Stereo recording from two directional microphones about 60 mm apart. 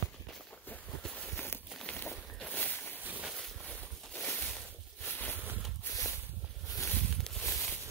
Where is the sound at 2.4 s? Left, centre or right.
Left.